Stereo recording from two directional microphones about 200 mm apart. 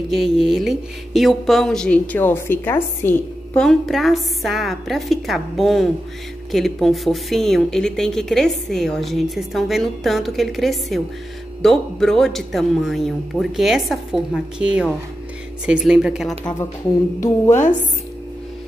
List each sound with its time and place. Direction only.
0.1 s speech: centre (ahead or behind)
17.2 s a woman's voice: 40° left (ahead or behind)